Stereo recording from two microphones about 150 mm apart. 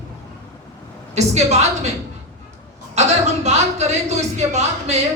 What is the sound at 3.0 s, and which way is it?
A woman's voice, 50° right (ahead or behind).